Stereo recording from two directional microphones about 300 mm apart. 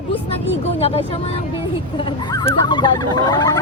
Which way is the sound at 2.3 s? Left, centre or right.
Centre.